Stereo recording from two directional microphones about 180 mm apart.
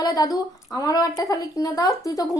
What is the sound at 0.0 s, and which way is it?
A woman's voice, 20° left (ahead or behind).